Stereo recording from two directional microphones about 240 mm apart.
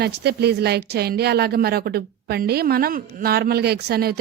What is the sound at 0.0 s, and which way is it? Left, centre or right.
A woman's voice, right.